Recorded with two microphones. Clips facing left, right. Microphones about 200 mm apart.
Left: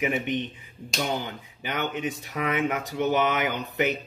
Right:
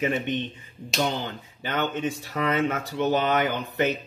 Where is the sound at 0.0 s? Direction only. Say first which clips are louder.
Right 1 dB; 15° left (ahead or behind).